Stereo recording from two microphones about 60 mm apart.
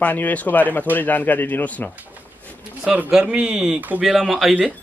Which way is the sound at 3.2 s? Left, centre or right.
Centre.